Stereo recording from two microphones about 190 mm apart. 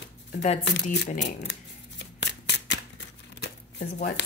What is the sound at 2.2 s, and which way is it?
Shuffling cards, 65° left (ahead or behind).